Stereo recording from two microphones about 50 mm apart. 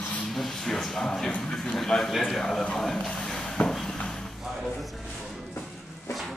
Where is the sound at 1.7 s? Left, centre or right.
Centre.